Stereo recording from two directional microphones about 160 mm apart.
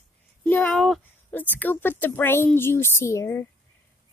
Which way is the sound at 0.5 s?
10° left (ahead or behind).